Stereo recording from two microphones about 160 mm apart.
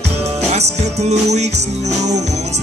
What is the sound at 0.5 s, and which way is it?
Music, 45° right (ahead or behind).